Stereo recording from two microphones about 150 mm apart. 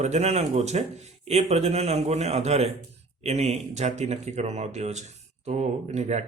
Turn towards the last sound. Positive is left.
turn(degrees=-50)  # may be behind; listen again after turning